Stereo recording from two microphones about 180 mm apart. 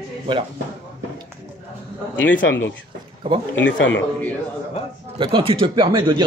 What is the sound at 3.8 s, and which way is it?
Speech, 90° left.